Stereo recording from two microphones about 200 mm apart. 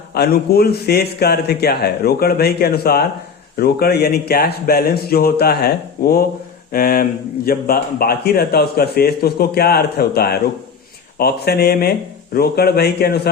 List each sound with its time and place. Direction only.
0.1 s speech: 50° left (ahead or behind)